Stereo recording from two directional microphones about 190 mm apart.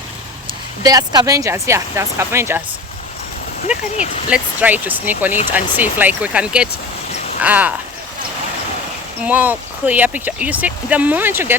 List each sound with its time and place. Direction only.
0.8 s speech: 20° right (ahead or behind)
3.7 s speech: 5° right (ahead or behind)
9.2 s speech: 10° right (ahead or behind)